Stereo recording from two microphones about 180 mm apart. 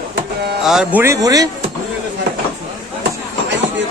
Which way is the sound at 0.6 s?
5° right (ahead or behind).